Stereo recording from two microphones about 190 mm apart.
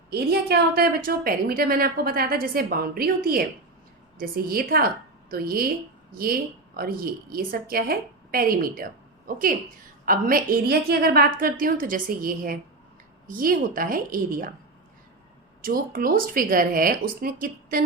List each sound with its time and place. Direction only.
0.1 s a woman's voice: 55° right (ahead or behind)
15.6 s a woman's voice: 50° right (ahead or behind)